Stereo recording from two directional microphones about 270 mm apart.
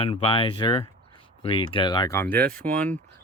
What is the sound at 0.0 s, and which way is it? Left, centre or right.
Speech, left.